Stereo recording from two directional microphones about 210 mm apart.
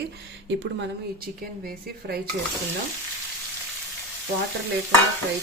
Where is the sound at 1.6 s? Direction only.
45° right (ahead or behind).